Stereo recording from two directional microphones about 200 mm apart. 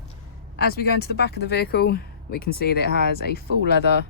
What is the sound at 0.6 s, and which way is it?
Speech, 55° left (ahead or behind).